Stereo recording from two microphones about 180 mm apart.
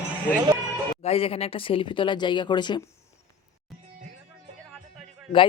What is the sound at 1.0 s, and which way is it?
Speech, 35° left (ahead or behind).